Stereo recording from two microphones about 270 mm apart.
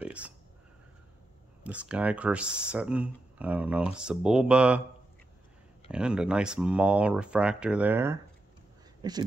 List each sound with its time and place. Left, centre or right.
0.0 s a sound: centre
1.6 s speech: centre
5.9 s speech: centre